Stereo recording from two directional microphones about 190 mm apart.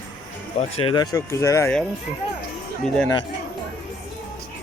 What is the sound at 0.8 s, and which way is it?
Speech, 25° left (ahead or behind).